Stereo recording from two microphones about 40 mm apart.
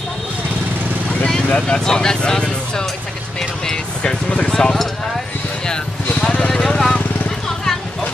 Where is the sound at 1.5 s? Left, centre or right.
Left.